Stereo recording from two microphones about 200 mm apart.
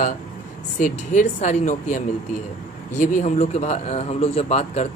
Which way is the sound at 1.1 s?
35° left (ahead or behind).